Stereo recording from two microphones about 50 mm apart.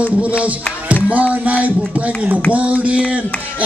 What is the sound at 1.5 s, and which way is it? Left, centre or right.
Speech, right.